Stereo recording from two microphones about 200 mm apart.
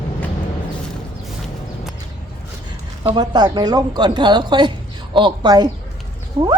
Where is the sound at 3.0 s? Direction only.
20° right (ahead or behind).